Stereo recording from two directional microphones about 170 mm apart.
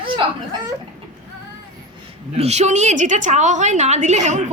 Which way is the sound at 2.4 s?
40° right (ahead or behind).